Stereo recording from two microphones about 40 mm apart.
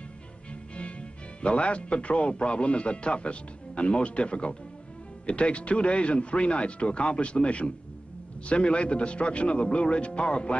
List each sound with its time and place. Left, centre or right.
1.4 s speech: left